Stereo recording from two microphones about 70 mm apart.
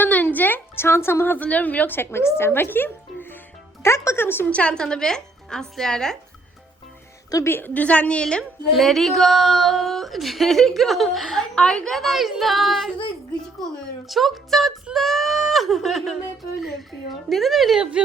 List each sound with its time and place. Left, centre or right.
0.0 s a woman's voice: left
3.8 s speech: left
4.5 s a woman's voice: centre
7.4 s a woman's voice: left; by 8.4 s centre
8.7 s a woman's voice: centre
11.5 s a woman's voice: centre
14.1 s a woman's voice: centre
16.9 s speech: left
17.2 s a woman's voice: centre